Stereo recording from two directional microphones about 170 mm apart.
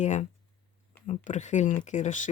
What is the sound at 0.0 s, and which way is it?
Speech, 45° left (ahead or behind).